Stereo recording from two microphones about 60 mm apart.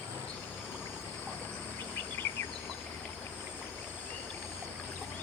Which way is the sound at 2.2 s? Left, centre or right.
Left.